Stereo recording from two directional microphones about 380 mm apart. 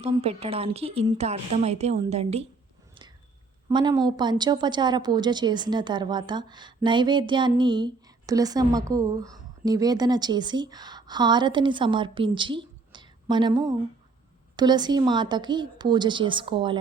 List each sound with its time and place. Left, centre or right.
0.0 s speech: centre
3.7 s speech: centre